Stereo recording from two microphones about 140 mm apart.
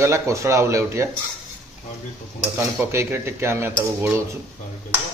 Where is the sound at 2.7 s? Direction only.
15° right (ahead or behind).